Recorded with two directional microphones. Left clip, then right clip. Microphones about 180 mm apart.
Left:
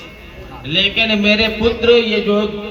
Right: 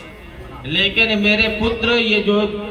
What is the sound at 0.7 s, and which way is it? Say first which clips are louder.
A man's voice: left 1 dB; 30° left (ahead or behind).